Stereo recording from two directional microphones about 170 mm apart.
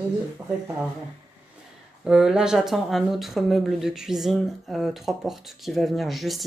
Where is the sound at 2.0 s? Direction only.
5° right (ahead or behind).